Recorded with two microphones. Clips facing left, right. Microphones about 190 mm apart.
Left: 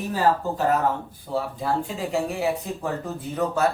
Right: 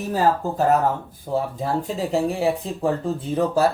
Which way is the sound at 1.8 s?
35° right (ahead or behind).